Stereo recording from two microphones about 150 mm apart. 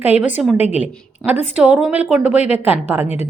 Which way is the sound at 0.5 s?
45° left (ahead or behind).